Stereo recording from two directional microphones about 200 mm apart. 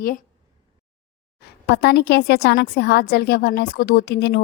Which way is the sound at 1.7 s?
55° left (ahead or behind).